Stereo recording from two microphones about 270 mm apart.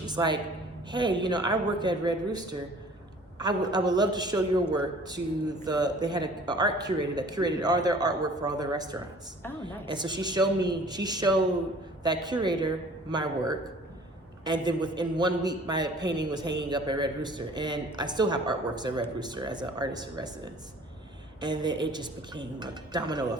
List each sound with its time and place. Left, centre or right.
0.0 s a woman's voice: centre